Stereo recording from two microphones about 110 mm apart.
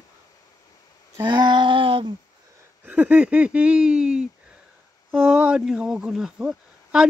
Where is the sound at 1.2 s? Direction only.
40° right (ahead or behind).